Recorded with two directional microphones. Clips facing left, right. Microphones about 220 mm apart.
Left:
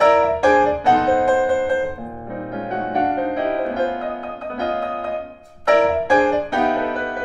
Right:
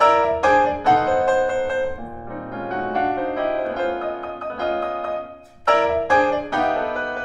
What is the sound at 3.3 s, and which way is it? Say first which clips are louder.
Music: left 2 dB; 20° left (ahead or behind).